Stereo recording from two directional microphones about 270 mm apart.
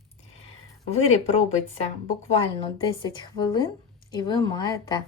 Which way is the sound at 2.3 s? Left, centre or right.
Centre.